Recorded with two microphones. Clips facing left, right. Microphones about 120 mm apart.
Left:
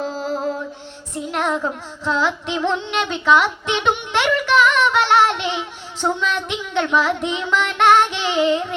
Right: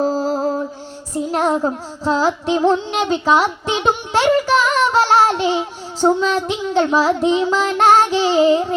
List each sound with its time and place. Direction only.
0.0 s music: 35° right (ahead or behind)
1.3 s child singing: 35° right (ahead or behind)